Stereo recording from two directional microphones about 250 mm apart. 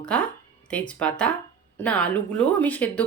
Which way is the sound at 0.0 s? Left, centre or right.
Centre.